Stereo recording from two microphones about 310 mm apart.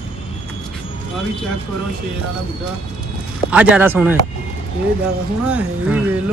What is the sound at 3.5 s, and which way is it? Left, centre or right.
Speech, centre.